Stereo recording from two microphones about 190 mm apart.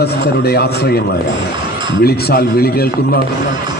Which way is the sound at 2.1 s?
55° left (ahead or behind).